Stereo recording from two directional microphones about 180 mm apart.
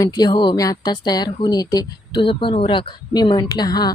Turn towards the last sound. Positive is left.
turn(degrees=25)  # may be behind; listen again after turning